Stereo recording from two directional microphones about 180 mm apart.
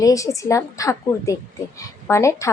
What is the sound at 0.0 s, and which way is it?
A woman's voice, 20° left (ahead or behind).